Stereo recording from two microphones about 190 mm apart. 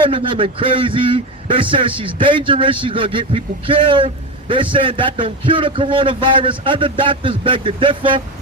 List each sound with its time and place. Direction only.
0.0 s speech: 25° right (ahead or behind)